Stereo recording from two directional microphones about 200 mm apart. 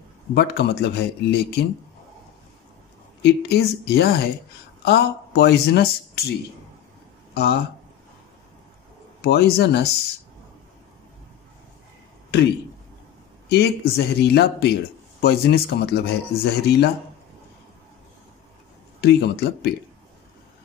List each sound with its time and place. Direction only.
0.3 s speech: 55° left (ahead or behind)
3.2 s speech: 55° left (ahead or behind)
7.3 s speech: 55° left (ahead or behind)
9.2 s speech: 55° left (ahead or behind)
13.5 s speech: 55° left (ahead or behind)
18.9 s speech: 55° left (ahead or behind)